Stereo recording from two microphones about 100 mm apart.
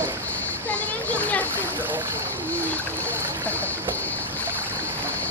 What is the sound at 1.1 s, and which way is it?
Speech, 15° left (ahead or behind).